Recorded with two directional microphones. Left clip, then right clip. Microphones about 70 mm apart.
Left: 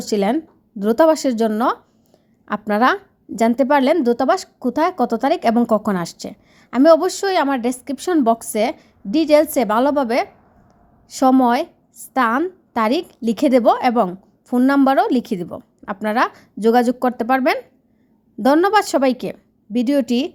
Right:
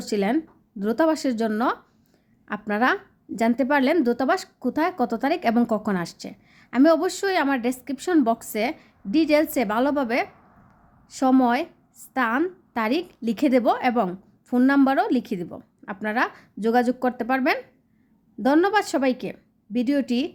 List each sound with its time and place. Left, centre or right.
0.0 s a woman's voice: left
1.5 s a woman's voice: left
2.5 s a woman's voice: left
4.0 s a woman's voice: left
6.0 s a woman's voice: left
11.1 s a woman's voice: left
11.3 s a woman's voice: left
14.4 s a woman's voice: left
14.8 s a woman's voice: left